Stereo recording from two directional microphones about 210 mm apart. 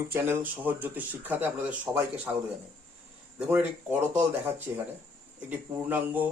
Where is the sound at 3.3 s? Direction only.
10° right (ahead or behind).